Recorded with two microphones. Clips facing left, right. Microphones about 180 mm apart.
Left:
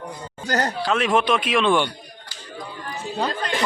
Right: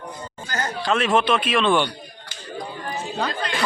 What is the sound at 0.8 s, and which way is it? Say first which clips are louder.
A man's voice: right 3 dB; 10° left (ahead or behind).